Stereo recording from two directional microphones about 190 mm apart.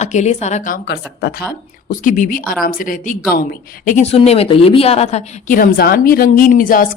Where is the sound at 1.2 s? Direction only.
55° left (ahead or behind).